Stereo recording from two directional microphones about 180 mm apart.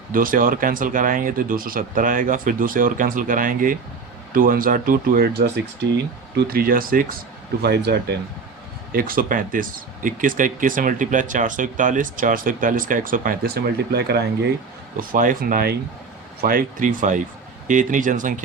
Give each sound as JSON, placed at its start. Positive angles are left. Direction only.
{"t": 0.1, "sound": "speech", "side_deg": -50}
{"t": 6.3, "sound": "speech", "side_deg": -55}
{"t": 7.6, "sound": "speech", "side_deg": -65}
{"t": 8.9, "sound": "speech", "side_deg": -50}
{"t": 14.9, "sound": "speech", "side_deg": -50}